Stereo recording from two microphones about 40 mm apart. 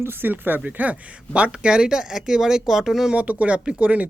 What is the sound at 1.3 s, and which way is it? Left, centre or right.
Speech, right.